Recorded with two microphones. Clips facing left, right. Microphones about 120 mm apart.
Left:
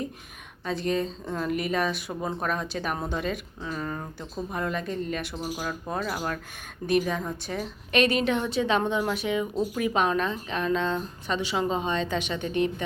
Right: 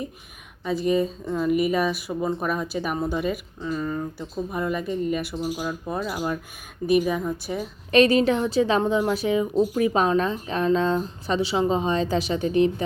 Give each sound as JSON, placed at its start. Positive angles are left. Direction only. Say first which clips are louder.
{"t": 0.6, "sound": "speech", "louder": "right 5 dB", "side_deg": -5}
{"t": 7.9, "sound": "a woman's voice", "louder": "right 6 dB", "side_deg": -35}